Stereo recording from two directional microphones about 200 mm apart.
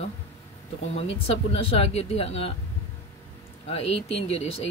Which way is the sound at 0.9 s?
30° left (ahead or behind).